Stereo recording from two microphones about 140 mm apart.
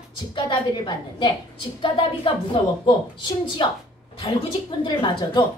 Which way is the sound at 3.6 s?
40° left (ahead or behind).